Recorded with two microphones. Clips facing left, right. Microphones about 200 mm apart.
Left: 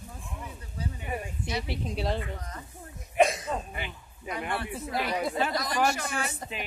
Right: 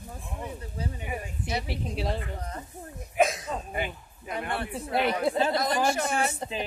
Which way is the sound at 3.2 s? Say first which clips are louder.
Left 1 dB; centre (ahead or behind).